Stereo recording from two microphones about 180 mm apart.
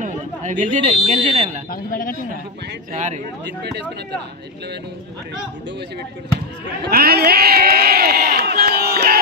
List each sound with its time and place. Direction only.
0.0 s speech: 45° right (ahead or behind)
1.7 s speech: 50° left (ahead or behind)
2.9 s speech: 40° right (ahead or behind)
6.9 s crowd: 60° right (ahead or behind)